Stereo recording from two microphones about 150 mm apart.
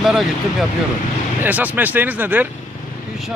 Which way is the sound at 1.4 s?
10° right (ahead or behind).